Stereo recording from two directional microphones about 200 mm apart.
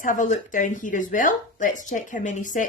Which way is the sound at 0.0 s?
40° left (ahead or behind).